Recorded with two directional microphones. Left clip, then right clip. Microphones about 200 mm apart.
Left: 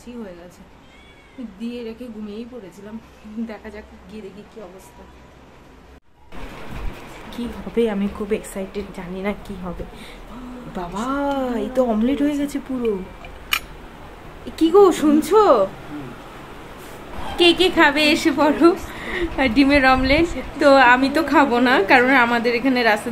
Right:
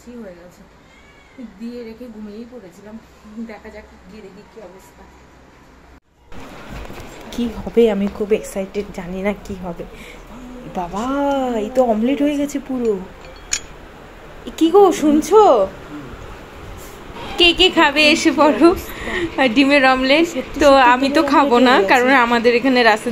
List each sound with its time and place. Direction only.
7.7 s speech: 20° right (ahead or behind)
10.7 s speech: 10° right (ahead or behind)
14.5 s a woman's voice: 5° right (ahead or behind)
17.4 s a woman's voice: 5° right (ahead or behind)